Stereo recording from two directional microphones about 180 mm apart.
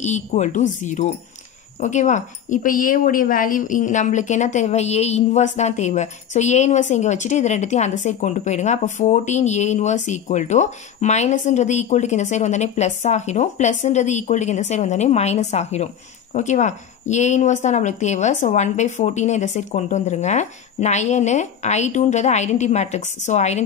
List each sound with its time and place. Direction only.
0.0 s a woman's voice: 40° left (ahead or behind)